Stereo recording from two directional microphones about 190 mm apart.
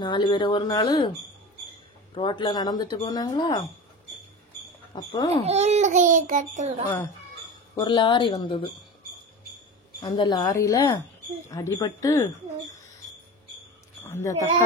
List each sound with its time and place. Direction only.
0.0 s speech: 25° left (ahead or behind)
2.1 s speech: 25° left (ahead or behind)
4.9 s speech: 20° left (ahead or behind)
5.4 s a child's voice: 35° right (ahead or behind)
7.7 s speech: 25° left (ahead or behind)
10.0 s speech: 25° left (ahead or behind)
14.0 s bleat: 10° left (ahead or behind)